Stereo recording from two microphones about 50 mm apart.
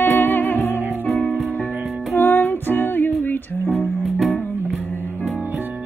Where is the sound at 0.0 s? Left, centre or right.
Left.